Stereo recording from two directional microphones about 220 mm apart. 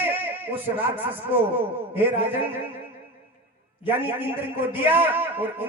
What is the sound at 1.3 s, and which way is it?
A man's voice, 10° right (ahead or behind).